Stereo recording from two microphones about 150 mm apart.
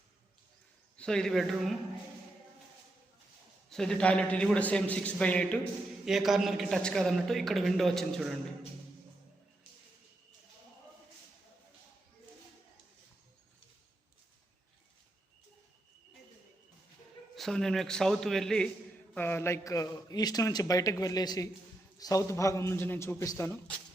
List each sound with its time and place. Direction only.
0.9 s a man's voice: 5° left (ahead or behind)
3.7 s a man's voice: 5° left (ahead or behind)
6.1 s a man's voice: 5° right (ahead or behind)
17.3 s a man's voice: centre (ahead or behind); by 23.5 s 20° left (ahead or behind)